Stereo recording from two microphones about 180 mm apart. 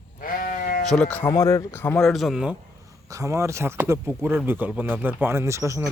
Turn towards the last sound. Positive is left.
turn(degrees=-15)  # may be behind; listen again after turning